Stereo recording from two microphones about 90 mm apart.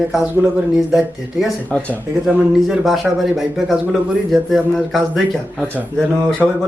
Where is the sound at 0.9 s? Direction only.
5° right (ahead or behind).